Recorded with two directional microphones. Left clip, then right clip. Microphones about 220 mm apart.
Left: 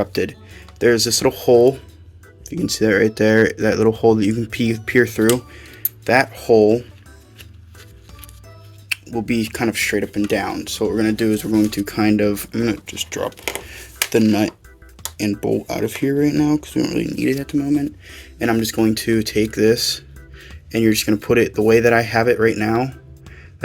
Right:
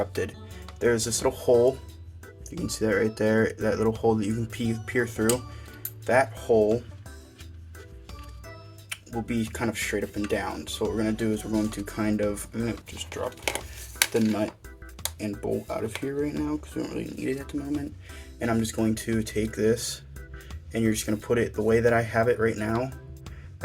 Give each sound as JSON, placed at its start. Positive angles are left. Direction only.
{"t": 0.0, "sound": "speech", "side_deg": 45}
{"t": 9.1, "sound": "speech", "side_deg": 50}